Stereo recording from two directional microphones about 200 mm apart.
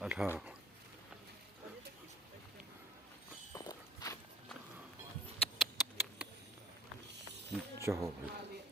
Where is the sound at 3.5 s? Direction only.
20° left (ahead or behind).